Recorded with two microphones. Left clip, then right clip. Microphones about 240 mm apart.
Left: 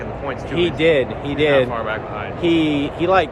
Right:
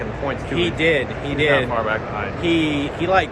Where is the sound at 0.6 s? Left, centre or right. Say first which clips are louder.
Left 3 dB; centre.